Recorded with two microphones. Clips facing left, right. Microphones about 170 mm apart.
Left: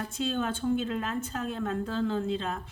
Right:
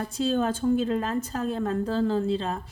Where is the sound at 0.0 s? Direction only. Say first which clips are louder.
Right 5 dB; 35° right (ahead or behind).